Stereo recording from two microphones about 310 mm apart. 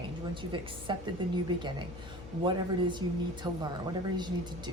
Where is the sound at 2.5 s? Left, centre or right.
Centre.